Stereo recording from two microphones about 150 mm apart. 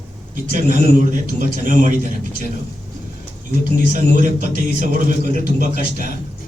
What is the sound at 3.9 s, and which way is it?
A man's voice, 60° right (ahead or behind).